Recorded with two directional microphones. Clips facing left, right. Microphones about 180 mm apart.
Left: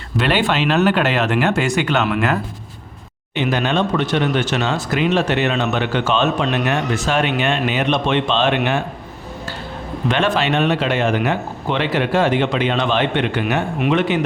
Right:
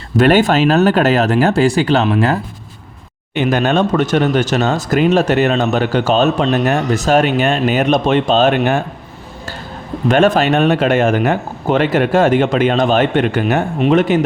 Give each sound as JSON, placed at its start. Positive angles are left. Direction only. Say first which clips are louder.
{"t": 0.2, "sound": "speech", "louder": "right 7 dB", "side_deg": -45}
{"t": 3.3, "sound": "speech", "louder": "right 4 dB", "side_deg": -45}
{"t": 10.1, "sound": "speech", "louder": "right 6 dB", "side_deg": -45}